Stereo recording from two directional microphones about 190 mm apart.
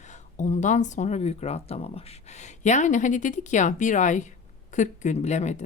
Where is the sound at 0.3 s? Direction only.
40° left (ahead or behind).